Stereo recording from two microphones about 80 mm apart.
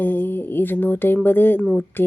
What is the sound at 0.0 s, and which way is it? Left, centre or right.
Speech, left.